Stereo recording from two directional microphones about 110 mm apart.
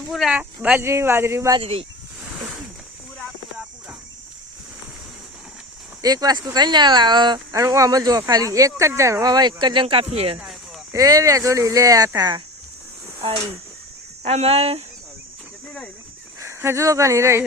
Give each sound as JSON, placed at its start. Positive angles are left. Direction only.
{"t": 0.1, "sound": "speech", "side_deg": 0}
{"t": 0.3, "sound": "speech", "side_deg": -15}
{"t": 0.9, "sound": "speech", "side_deg": -25}
{"t": 6.0, "sound": "speech", "side_deg": -35}
{"t": 7.5, "sound": "speech", "side_deg": -30}
{"t": 9.8, "sound": "speech", "side_deg": -60}
{"t": 10.9, "sound": "speech", "side_deg": -30}
{"t": 14.3, "sound": "speech", "side_deg": -65}
{"t": 16.4, "sound": "speech", "side_deg": -25}